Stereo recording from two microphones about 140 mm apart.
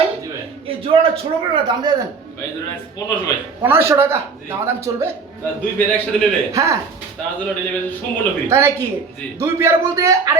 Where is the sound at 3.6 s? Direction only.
15° right (ahead or behind).